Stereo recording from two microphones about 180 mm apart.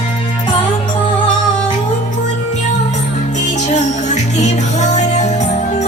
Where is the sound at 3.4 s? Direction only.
40° left (ahead or behind).